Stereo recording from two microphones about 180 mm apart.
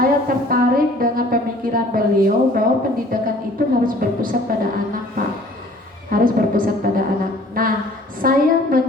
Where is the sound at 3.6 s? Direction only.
55° right (ahead or behind).